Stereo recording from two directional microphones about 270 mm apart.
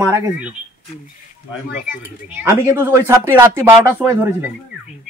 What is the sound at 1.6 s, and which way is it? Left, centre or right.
Speech, left.